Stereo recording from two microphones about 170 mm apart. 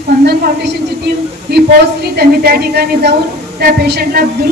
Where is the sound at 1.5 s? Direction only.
75° right (ahead or behind).